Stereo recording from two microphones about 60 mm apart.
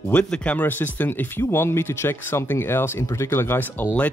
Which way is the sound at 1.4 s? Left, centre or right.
Left.